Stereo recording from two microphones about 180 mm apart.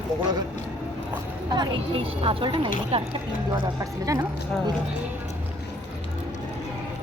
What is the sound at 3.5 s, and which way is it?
Speech, 20° right (ahead or behind).